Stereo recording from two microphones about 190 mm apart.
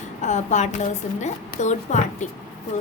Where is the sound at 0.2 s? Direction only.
40° left (ahead or behind).